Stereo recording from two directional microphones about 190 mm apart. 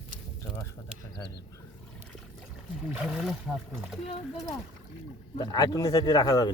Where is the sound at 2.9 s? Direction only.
5° right (ahead or behind).